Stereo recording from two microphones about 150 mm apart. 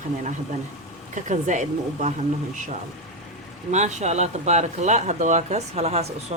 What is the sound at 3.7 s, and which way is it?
Speech, 50° right (ahead or behind).